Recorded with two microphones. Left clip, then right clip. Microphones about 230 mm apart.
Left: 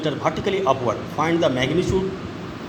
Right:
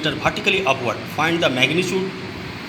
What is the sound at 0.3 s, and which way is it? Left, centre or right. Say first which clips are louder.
A man's voice: right 2 dB; centre.